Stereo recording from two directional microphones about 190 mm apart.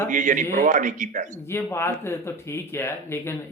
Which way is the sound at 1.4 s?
15° left (ahead or behind).